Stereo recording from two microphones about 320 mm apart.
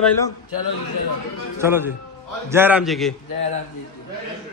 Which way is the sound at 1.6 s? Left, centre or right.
Centre.